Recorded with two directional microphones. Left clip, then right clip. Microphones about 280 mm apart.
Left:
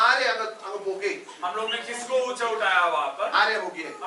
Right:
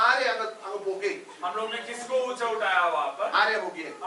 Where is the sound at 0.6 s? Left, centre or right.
Centre.